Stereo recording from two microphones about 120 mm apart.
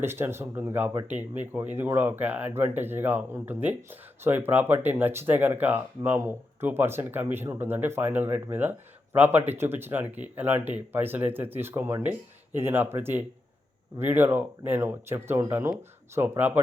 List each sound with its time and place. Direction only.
0.0 s speech: 20° right (ahead or behind)